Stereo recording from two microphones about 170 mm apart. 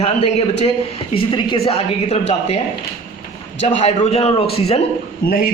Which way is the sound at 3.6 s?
45° left (ahead or behind).